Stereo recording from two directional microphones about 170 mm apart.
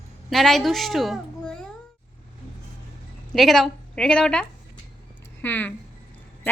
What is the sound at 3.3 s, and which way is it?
A woman's voice, centre (ahead or behind).